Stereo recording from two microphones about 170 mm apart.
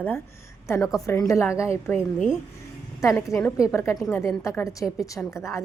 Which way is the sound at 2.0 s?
5° right (ahead or behind).